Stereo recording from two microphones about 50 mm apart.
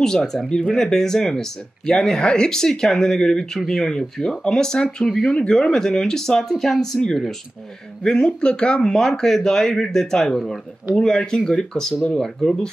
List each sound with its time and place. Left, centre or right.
0.0 s speech: centre